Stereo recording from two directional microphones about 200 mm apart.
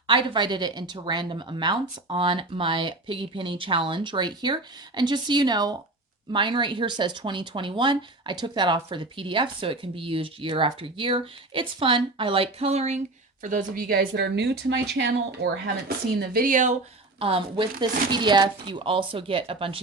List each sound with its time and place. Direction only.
0.1 s a woman's voice: 25° right (ahead or behind); by 15.7 s 60° right (ahead or behind)
16.2 s a woman's voice: 45° right (ahead or behind)
17.2 s speech: 25° right (ahead or behind)